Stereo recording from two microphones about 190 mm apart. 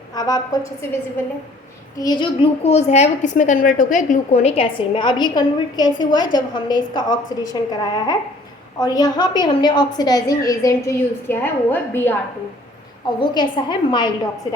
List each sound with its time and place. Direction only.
0.2 s a woman's voice: 20° left (ahead or behind)
2.0 s a woman's voice: 20° left (ahead or behind)
13.1 s a woman's voice: 25° left (ahead or behind)